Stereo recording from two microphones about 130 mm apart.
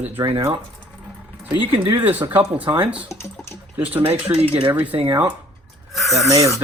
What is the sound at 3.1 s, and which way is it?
Speech, 20° left (ahead or behind).